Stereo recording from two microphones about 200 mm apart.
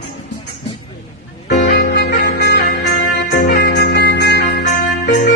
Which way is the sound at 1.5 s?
40° left (ahead or behind).